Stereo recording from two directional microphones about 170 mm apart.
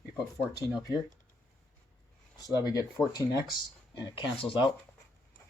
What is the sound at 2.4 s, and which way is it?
Speech, 25° left (ahead or behind).